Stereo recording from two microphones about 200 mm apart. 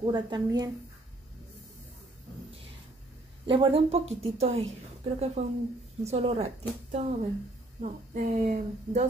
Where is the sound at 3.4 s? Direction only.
25° right (ahead or behind).